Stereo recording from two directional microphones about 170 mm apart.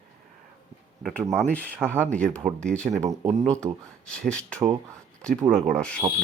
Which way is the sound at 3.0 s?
20° right (ahead or behind).